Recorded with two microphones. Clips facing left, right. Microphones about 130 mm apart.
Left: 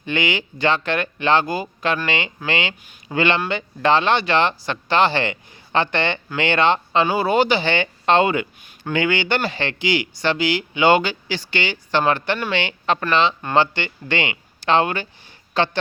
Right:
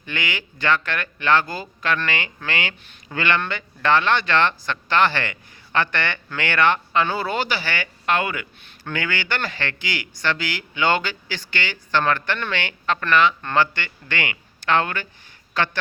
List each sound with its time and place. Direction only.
0.0 s speech: 20° left (ahead or behind)